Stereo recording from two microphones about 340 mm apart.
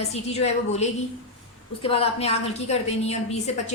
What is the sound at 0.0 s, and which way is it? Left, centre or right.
A woman's voice, centre.